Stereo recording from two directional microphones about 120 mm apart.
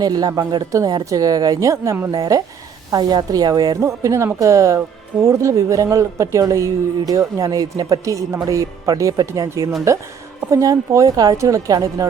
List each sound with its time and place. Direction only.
0.0 s a woman's voice: 35° right (ahead or behind)